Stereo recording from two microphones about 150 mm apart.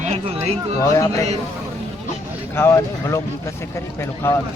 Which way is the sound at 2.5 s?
15° left (ahead or behind).